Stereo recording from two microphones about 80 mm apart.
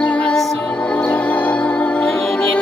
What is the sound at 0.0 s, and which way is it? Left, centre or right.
Music, centre.